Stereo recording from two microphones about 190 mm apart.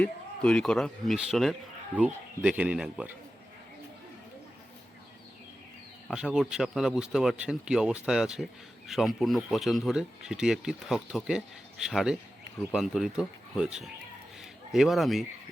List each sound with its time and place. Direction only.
0.0 s speech: 5° left (ahead or behind)
6.1 s speech: 5° right (ahead or behind)